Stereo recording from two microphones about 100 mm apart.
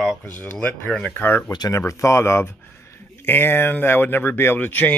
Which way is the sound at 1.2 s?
20° left (ahead or behind).